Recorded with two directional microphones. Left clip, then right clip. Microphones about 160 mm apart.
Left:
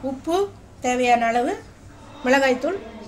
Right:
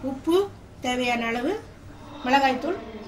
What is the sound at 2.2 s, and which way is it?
Speech, 65° left (ahead or behind).